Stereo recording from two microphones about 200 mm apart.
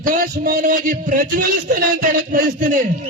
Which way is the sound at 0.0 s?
45° right (ahead or behind).